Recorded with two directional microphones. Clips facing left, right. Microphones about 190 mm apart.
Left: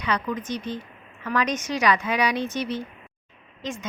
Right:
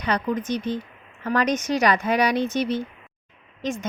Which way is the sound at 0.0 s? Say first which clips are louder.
Right 3 dB; 40° right (ahead or behind).